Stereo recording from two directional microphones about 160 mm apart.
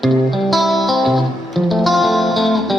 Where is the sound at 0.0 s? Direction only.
Centre (ahead or behind).